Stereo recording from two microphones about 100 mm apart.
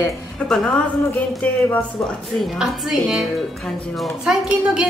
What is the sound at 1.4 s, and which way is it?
Speech, 15° left (ahead or behind).